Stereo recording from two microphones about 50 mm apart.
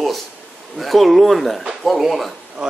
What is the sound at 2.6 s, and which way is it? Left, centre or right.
Speech, centre.